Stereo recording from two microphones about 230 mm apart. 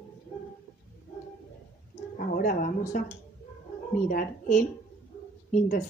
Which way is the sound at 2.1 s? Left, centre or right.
Left.